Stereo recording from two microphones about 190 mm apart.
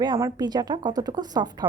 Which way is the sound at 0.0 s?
20° right (ahead or behind).